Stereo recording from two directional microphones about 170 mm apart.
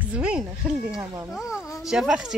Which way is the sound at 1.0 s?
5° right (ahead or behind).